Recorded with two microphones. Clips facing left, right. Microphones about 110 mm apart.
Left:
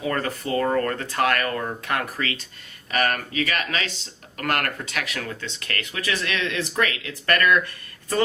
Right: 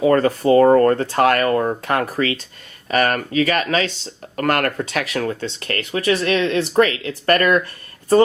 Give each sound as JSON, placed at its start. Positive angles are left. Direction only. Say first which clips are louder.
{"t": 0.0, "sound": "speech", "louder": "right 11 dB", "side_deg": -40}